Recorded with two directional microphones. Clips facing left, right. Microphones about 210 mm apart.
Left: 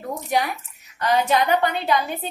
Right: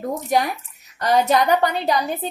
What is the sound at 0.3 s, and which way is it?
A woman's voice, 40° right (ahead or behind).